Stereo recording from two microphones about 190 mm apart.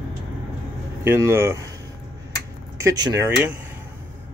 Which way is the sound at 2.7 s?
20° right (ahead or behind).